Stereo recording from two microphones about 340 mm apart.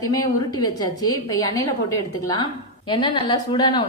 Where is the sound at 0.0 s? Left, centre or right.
Centre.